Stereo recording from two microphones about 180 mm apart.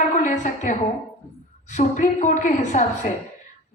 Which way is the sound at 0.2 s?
40° left (ahead or behind).